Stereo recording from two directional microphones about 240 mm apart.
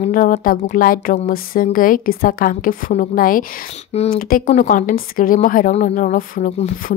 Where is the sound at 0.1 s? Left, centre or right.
Left.